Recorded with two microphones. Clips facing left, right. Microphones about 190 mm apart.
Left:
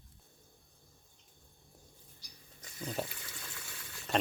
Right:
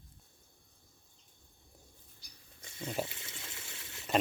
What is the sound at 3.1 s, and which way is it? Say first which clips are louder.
Water: even; 25° right (ahead or behind).